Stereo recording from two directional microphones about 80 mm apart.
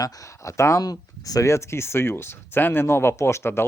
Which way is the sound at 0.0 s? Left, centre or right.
Left.